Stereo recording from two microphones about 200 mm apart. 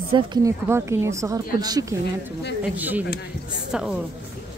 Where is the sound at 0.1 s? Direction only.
20° right (ahead or behind); by 3.9 s 5° right (ahead or behind).